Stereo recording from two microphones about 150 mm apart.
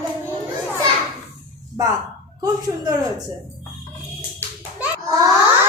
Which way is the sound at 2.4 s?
25° right (ahead or behind).